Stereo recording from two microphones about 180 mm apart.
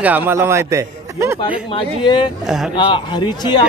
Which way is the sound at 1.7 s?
25° left (ahead or behind).